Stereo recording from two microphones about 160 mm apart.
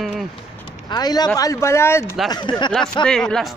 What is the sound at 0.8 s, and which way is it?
Speech, 25° left (ahead or behind).